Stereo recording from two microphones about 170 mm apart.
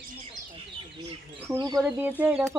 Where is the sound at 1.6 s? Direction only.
25° right (ahead or behind).